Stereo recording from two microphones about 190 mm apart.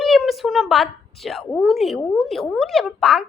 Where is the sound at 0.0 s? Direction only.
Centre (ahead or behind).